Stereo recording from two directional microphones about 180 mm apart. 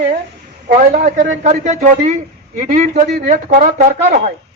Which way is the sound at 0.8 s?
45° right (ahead or behind).